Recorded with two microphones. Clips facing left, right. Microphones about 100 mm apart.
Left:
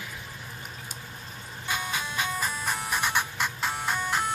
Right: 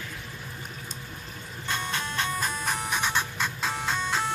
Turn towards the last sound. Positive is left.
turn(degrees=10)  # may be behind; listen again after turning